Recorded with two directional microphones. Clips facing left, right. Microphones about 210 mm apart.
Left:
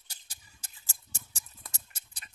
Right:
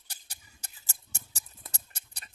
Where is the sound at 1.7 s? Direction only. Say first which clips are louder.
Right 3 dB; 65° right (ahead or behind).